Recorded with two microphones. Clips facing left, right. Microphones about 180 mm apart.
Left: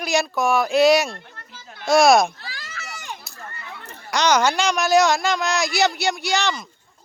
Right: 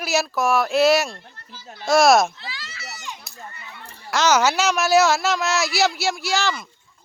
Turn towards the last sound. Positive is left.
turn(degrees=0)  # may be behind; listen again after turning